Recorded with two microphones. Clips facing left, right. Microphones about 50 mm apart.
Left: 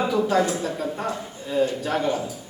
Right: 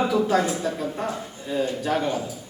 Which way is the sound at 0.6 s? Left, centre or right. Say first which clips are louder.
Even; centre.